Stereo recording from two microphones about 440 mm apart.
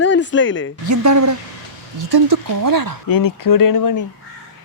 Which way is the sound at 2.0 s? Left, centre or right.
Right.